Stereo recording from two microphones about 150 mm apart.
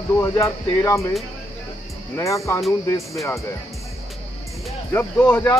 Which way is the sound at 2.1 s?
20° left (ahead or behind).